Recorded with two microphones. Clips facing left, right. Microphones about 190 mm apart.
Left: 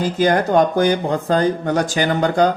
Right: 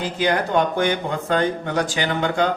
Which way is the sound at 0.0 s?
45° left (ahead or behind).